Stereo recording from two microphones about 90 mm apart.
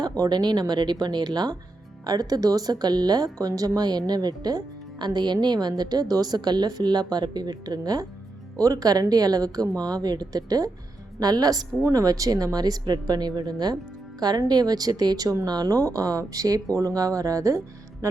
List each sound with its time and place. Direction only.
0.2 s speech: 50° right (ahead or behind)